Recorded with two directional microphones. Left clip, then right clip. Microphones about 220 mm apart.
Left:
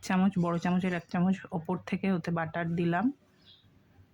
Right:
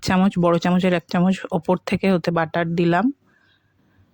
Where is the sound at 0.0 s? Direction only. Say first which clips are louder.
Right 11 dB; 40° right (ahead or behind).